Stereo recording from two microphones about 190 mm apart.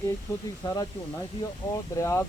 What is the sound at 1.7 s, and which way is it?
Speech, 15° left (ahead or behind).